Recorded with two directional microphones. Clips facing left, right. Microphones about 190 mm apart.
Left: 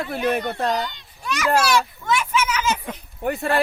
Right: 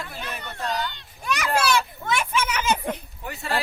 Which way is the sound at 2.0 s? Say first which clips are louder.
Left 3 dB; 55° right (ahead or behind).